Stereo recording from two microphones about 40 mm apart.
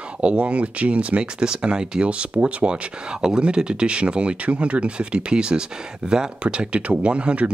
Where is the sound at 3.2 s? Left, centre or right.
Right.